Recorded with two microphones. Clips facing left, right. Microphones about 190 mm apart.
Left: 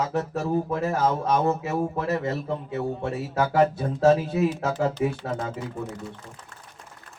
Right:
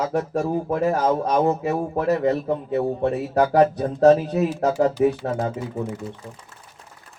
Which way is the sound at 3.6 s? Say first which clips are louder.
Right 3 dB; 40° right (ahead or behind).